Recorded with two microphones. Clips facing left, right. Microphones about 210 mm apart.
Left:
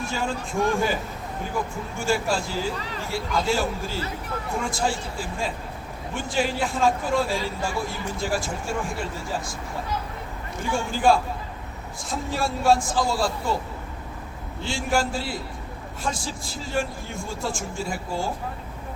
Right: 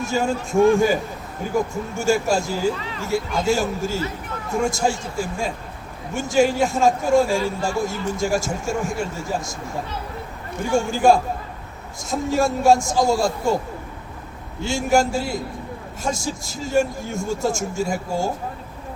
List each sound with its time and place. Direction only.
0.0 s speech: 45° right (ahead or behind)
10.7 s speech: 45° right (ahead or behind)
14.6 s speech: 45° right (ahead or behind)